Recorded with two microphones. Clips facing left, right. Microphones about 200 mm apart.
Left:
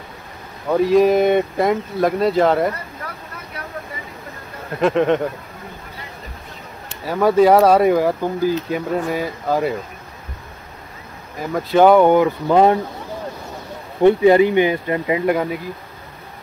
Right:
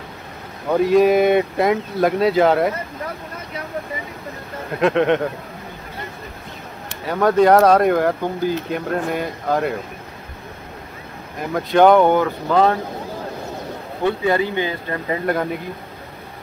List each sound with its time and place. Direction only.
0.7 s speech: centre (ahead or behind)
4.7 s speech: centre (ahead or behind)
7.1 s speech: 5° left (ahead or behind)
11.5 s speech: 5° left (ahead or behind)
14.0 s speech: 20° left (ahead or behind)